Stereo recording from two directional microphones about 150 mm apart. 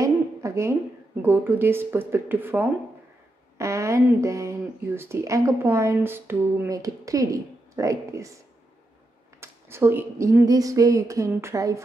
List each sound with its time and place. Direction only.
0.0 s a sound: 20° right (ahead or behind)
1.2 s speech: 15° right (ahead or behind)
9.4 s speech: 15° right (ahead or behind)